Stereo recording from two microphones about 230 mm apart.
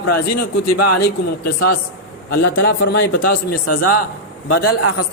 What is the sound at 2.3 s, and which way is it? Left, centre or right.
Speech, left.